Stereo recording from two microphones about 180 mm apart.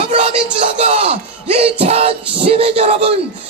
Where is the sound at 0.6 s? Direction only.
40° right (ahead or behind).